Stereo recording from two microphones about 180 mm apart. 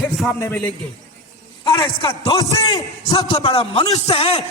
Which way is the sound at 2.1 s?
15° left (ahead or behind).